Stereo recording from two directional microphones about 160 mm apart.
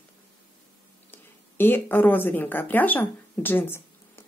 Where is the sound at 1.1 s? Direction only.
10° left (ahead or behind).